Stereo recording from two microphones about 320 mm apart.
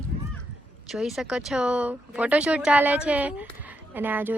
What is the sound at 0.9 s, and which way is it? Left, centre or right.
Speech, centre.